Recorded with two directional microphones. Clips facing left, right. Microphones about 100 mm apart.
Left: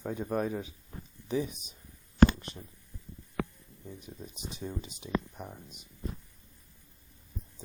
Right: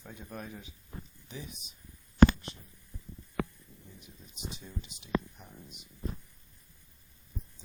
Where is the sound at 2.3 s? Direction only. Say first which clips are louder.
Left 2 dB; 50° left (ahead or behind).